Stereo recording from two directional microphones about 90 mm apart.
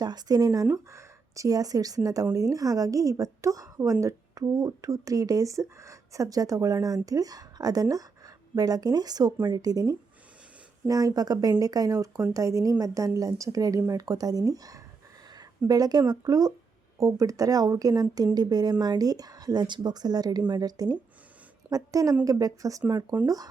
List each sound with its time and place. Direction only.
0.0 s speech: 50° right (ahead or behind)